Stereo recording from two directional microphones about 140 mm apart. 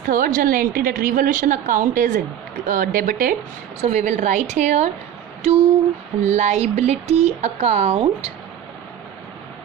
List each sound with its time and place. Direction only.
0.1 s a woman's voice: 80° right
3.8 s a woman's voice: 55° right (ahead or behind)
5.4 s a sound: 40° right (ahead or behind)
6.2 s speech: 55° right (ahead or behind)